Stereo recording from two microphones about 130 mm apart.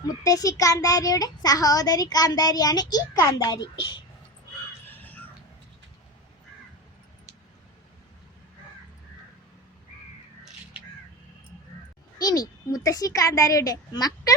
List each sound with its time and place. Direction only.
0.1 s a child's voice: 25° left (ahead or behind)
4.9 s music: 15° left (ahead or behind)
12.2 s a child's voice: 30° left (ahead or behind)